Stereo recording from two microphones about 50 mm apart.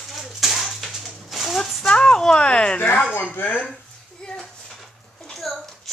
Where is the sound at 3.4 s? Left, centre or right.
Left.